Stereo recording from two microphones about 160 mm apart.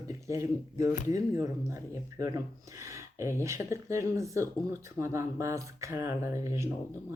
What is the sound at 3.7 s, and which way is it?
Speech, 20° right (ahead or behind).